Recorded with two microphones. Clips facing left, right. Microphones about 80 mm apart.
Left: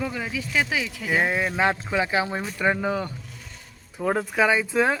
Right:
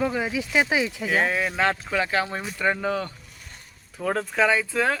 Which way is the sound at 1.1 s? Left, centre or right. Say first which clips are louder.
Left 1 dB; centre.